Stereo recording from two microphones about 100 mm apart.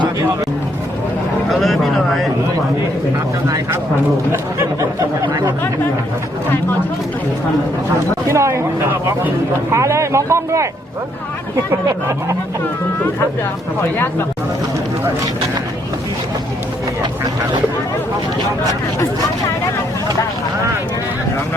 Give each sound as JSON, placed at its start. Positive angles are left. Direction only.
{"t": 1.5, "sound": "speech", "side_deg": 0}
{"t": 4.3, "sound": "speech", "side_deg": -25}
{"t": 8.3, "sound": "speech", "side_deg": -30}
{"t": 9.7, "sound": "speech", "side_deg": -30}
{"t": 11.7, "sound": "speech", "side_deg": -25}